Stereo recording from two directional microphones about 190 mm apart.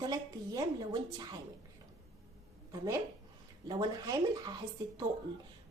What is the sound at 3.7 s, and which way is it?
Speech, 20° right (ahead or behind).